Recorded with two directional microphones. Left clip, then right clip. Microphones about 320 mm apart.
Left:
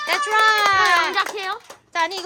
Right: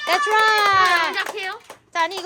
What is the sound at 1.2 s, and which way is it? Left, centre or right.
Speech, left.